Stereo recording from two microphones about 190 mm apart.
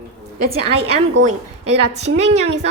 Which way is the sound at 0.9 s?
35° right (ahead or behind).